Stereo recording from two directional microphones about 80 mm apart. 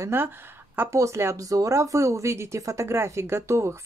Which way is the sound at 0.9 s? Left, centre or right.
Right.